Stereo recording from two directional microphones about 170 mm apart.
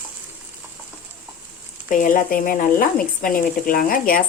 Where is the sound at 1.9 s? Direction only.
50° left (ahead or behind).